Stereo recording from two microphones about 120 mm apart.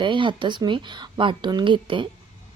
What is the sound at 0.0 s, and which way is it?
Speech, 45° right (ahead or behind).